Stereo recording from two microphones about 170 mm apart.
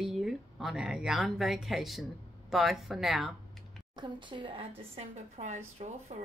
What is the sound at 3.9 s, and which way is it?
A woman's voice, 25° right (ahead or behind).